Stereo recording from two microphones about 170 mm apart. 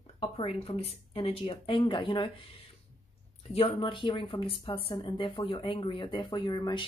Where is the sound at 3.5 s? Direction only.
35° left (ahead or behind).